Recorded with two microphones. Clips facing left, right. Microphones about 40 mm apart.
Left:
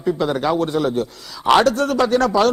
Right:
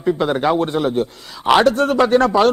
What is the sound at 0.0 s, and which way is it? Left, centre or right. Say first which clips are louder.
A man's voice: right 2 dB; right.